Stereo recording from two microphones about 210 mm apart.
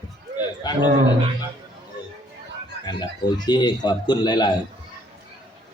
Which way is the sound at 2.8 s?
20° left (ahead or behind).